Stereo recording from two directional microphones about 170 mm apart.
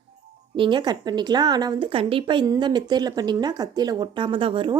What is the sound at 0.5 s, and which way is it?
Speech, 30° right (ahead or behind).